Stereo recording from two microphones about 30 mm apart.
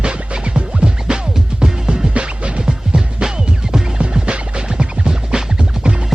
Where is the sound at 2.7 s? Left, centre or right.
Right.